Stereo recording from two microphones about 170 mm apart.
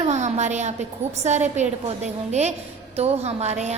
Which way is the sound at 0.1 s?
45° right (ahead or behind).